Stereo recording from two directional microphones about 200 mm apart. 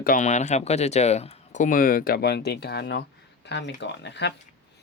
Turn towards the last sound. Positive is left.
turn(degrees=60)  # may be behind; listen again after turning